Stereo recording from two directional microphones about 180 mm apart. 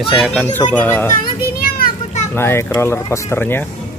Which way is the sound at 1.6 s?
55° left (ahead or behind).